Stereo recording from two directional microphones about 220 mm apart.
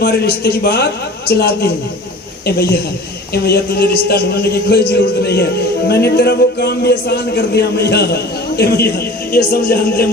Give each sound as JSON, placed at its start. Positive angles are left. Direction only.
{"t": 0.0, "sound": "a man's voice", "side_deg": 45}
{"t": 3.3, "sound": "a man's voice", "side_deg": 45}